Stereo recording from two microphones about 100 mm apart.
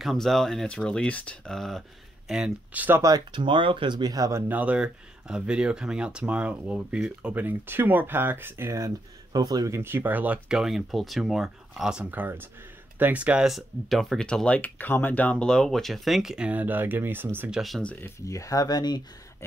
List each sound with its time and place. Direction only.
0.0 s speech: centre (ahead or behind); by 3.0 s 15° right (ahead or behind)
3.0 s speech: 45° right (ahead or behind)
4.5 s speech: 15° right (ahead or behind)
9.3 s speech: 40° right (ahead or behind)
9.8 s speech: 20° right (ahead or behind)
17.5 s speech: centre (ahead or behind)
18.0 s speech: 35° left (ahead or behind)